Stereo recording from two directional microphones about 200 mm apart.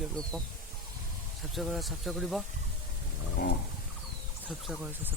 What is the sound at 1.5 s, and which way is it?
Speech, centre (ahead or behind).